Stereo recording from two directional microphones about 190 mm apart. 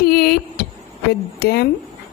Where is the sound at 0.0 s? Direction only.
55° left (ahead or behind).